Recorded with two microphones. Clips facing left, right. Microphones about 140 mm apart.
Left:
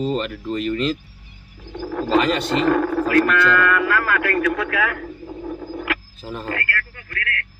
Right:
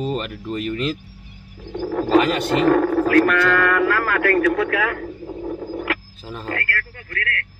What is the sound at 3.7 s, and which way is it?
Radio, 40° right (ahead or behind).